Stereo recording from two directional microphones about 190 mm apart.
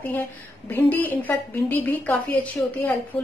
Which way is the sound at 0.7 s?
10° left (ahead or behind).